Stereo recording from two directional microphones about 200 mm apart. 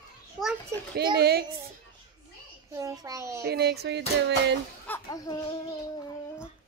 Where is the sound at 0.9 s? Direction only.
55° right (ahead or behind).